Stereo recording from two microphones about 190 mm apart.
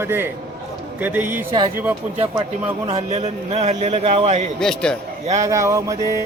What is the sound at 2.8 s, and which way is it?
A man's voice, 35° right (ahead or behind).